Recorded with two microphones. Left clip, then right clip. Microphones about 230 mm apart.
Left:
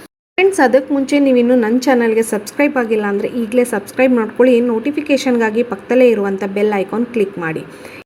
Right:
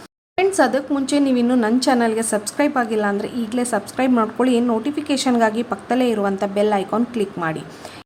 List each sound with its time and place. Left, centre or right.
0.3 s speech: centre